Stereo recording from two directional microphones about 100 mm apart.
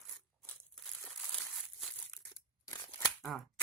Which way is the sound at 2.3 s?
40° left (ahead or behind).